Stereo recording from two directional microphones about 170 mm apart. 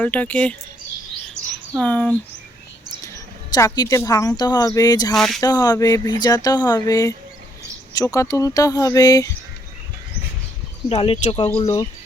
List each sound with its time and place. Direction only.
0.0 s speech: 10° left (ahead or behind)
1.3 s chirp: 5° left (ahead or behind)
3.5 s speech: 20° left (ahead or behind)
5.1 s speech: centre (ahead or behind)
5.4 s speech: 25° left (ahead or behind)
10.8 s speech: 35° left (ahead or behind)